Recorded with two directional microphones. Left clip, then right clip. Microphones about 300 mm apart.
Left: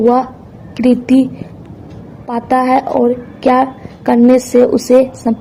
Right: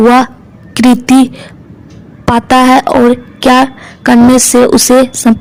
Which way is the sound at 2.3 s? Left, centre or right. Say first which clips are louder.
Right 6 dB; right.